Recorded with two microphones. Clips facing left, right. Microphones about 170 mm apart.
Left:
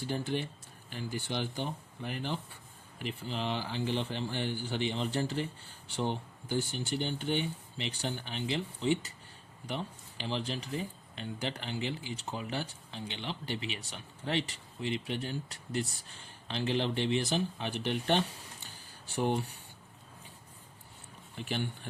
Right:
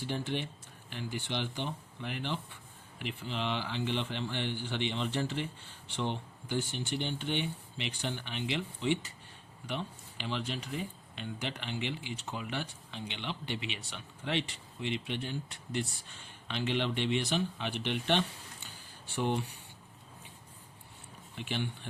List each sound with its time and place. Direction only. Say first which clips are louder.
0.1 s speech: left 2 dB; 40° left (ahead or behind)
21.3 s speech: left 1 dB; 40° left (ahead or behind)